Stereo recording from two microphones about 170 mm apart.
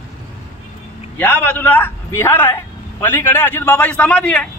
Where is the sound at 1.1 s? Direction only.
10° left (ahead or behind).